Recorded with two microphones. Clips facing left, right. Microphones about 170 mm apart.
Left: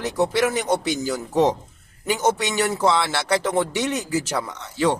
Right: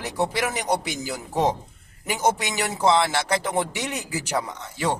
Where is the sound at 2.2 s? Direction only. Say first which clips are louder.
Left 2 dB; 15° right (ahead or behind).